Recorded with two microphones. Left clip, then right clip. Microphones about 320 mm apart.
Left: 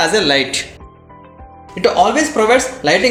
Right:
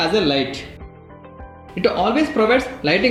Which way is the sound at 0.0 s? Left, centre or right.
Left.